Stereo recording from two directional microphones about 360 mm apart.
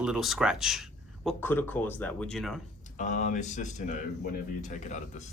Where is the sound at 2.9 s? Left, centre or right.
Centre.